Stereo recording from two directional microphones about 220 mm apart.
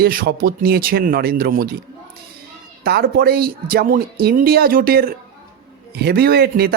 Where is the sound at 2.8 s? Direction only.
45° right (ahead or behind).